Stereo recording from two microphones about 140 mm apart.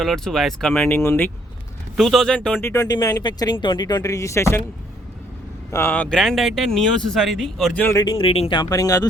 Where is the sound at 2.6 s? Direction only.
20° left (ahead or behind).